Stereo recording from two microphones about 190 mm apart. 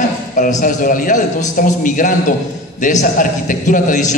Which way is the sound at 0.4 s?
40° left (ahead or behind).